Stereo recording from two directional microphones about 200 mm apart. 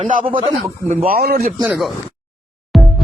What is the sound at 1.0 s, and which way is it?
Speech, 50° right (ahead or behind).